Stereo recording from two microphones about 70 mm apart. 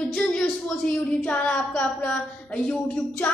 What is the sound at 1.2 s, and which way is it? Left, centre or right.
A woman's voice, centre.